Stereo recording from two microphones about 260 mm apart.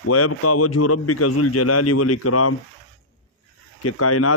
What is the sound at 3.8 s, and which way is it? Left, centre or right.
Speech, left.